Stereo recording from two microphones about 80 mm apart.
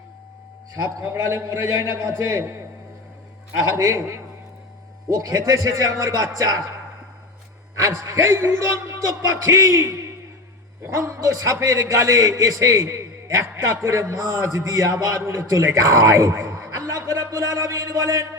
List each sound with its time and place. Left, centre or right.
0.9 s a man's voice: right
3.8 s a man's voice: right
7.8 s a man's voice: right